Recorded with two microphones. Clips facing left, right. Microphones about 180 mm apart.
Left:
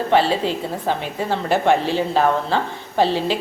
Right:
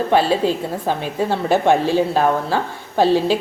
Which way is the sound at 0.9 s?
15° right (ahead or behind).